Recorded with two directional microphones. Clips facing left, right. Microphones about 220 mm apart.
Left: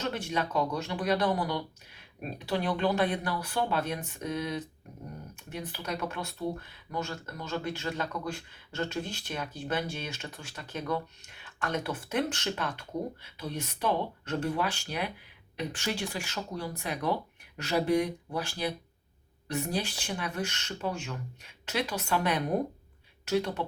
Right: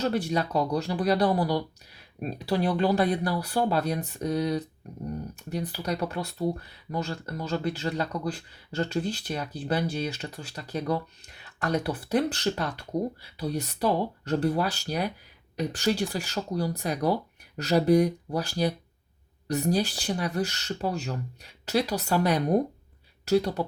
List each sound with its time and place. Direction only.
0.0 s speech: 35° right (ahead or behind)